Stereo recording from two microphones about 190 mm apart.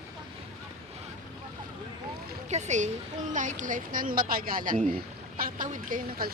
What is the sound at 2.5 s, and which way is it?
Speech, 35° right (ahead or behind).